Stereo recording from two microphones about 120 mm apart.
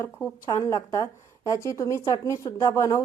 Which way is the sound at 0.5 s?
25° left (ahead or behind).